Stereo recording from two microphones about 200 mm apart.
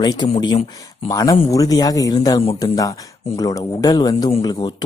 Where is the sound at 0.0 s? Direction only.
20° left (ahead or behind).